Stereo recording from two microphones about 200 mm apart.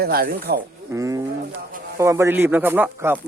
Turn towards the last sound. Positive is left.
turn(degrees=-10)  # may be behind; listen again after turning